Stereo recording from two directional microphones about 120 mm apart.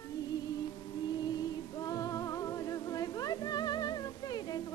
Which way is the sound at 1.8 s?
30° left (ahead or behind).